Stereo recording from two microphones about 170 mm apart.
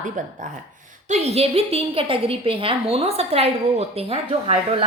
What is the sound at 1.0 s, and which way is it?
A woman's voice, 40° right (ahead or behind).